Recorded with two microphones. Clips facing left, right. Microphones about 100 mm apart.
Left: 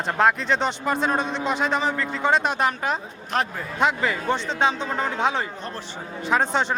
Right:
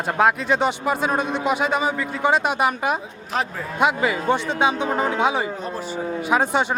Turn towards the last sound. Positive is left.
turn(degrees=-10)  # may be behind; listen again after turning